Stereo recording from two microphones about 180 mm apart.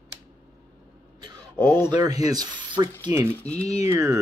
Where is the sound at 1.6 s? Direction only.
10° left (ahead or behind).